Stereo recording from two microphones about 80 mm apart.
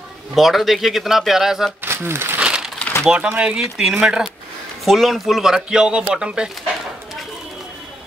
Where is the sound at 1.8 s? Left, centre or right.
Right.